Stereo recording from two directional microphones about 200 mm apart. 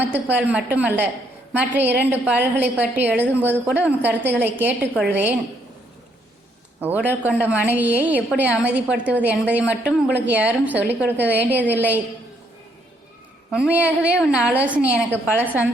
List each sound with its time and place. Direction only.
0.1 s a woman's voice: 10° right (ahead or behind)
6.7 s a woman's voice: 10° right (ahead or behind)
13.5 s a woman's voice: 5° right (ahead or behind)